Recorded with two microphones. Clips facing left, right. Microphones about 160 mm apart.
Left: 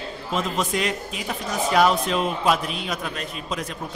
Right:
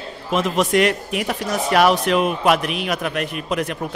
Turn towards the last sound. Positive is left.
turn(degrees=-65)  # may be behind; listen again after turning